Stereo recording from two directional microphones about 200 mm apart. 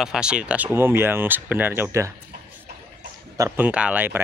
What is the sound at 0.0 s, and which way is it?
Speech, 5° right (ahead or behind).